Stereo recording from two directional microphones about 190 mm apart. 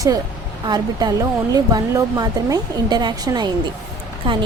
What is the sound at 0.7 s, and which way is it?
Speech, 20° right (ahead or behind).